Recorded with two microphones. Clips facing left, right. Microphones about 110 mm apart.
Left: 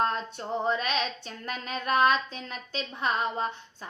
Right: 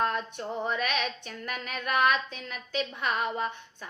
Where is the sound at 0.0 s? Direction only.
30° left (ahead or behind).